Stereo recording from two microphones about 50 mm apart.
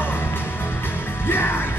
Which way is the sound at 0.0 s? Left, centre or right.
Left.